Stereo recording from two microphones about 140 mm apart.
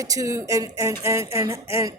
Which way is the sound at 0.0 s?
25° right (ahead or behind).